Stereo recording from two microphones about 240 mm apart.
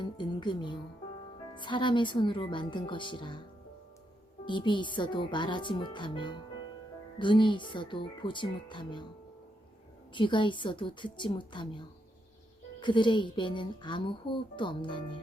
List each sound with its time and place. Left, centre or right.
0.0 s speech: centre
4.4 s speech: centre
10.2 s speech: centre
12.8 s speech: centre